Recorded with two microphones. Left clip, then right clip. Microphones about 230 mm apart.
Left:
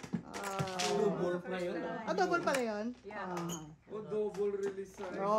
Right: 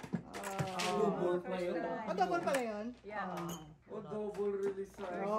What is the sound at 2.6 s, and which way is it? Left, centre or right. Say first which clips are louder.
Speech: left 3 dB; left.